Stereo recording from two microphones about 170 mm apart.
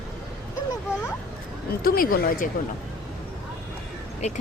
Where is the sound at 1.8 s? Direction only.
60° left (ahead or behind).